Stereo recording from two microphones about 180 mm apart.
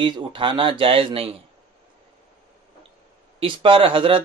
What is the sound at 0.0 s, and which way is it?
Speech, 25° right (ahead or behind).